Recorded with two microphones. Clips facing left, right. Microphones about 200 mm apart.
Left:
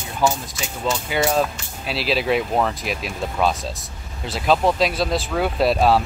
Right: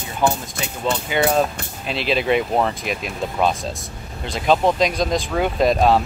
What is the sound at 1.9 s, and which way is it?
Speech, 5° left (ahead or behind).